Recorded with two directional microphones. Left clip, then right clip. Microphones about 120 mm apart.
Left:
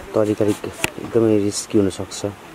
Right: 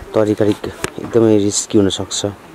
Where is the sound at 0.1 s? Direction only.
10° right (ahead or behind).